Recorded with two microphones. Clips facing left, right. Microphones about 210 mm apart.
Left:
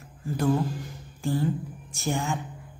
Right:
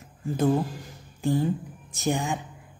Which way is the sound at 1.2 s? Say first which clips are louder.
Right 2 dB; 20° right (ahead or behind).